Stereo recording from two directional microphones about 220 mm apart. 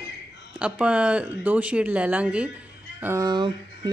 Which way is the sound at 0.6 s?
5° right (ahead or behind).